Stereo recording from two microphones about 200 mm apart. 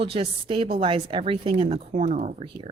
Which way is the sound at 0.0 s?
25° right (ahead or behind).